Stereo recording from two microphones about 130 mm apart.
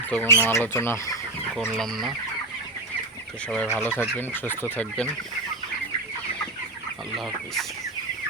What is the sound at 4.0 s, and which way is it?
Speech, 15° left (ahead or behind).